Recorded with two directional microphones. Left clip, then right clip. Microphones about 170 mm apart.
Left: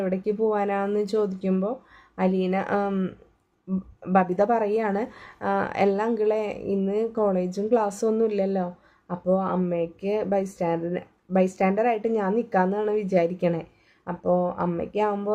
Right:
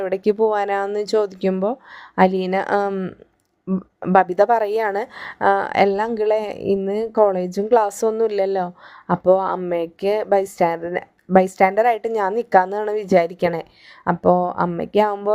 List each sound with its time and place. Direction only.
0.0 s speech: 50° right (ahead or behind)
4.0 s speech: 50° right (ahead or behind)